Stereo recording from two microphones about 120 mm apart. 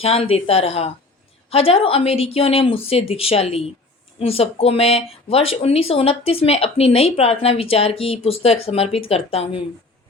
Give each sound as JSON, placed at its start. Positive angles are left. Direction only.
{"t": 0.0, "sound": "a woman's voice", "side_deg": 55}